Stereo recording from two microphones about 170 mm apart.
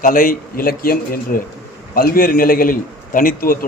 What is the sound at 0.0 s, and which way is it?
A man's voice, 55° left (ahead or behind).